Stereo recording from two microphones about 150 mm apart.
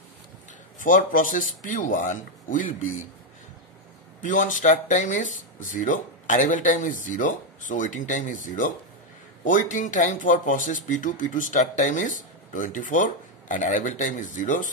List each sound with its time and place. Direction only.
0.7 s speech: 65° left (ahead or behind)
4.2 s speech: 60° left (ahead or behind)